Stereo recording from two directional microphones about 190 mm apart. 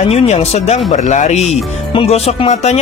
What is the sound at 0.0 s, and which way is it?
Speech, 35° left (ahead or behind).